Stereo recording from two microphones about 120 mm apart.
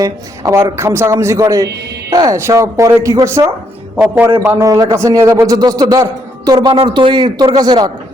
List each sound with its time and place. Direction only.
0.0 s speech: 25° right (ahead or behind)
6.7 s a man's voice: 45° right (ahead or behind)